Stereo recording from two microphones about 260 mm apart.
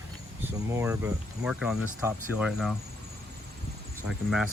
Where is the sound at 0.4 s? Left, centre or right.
Centre.